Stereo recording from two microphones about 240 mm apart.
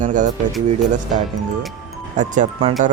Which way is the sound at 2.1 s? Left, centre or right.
Right.